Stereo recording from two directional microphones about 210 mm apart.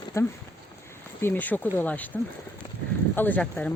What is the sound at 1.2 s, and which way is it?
Speech, 10° left (ahead or behind).